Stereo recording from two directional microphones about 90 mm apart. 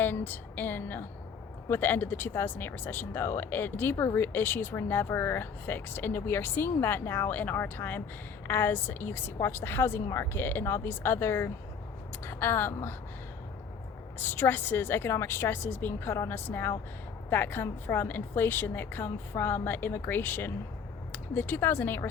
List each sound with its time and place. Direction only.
0.0 s speech: 20° left (ahead or behind)
14.2 s speech: 25° left (ahead or behind)